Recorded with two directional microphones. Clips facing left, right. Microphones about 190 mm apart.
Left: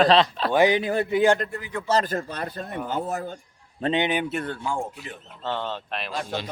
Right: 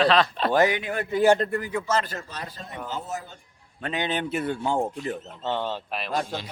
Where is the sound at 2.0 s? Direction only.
50° left (ahead or behind).